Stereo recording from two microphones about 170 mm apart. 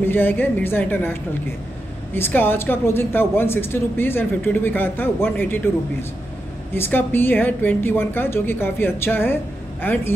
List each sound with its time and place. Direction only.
0.0 s speech: 10° left (ahead or behind)
2.1 s speech: 10° left (ahead or behind)
6.7 s speech: 10° left (ahead or behind)